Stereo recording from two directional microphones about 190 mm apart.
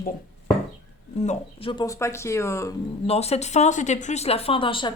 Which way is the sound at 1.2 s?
35° left (ahead or behind).